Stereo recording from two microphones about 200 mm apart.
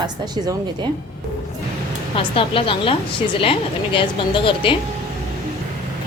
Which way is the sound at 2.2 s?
25° left (ahead or behind).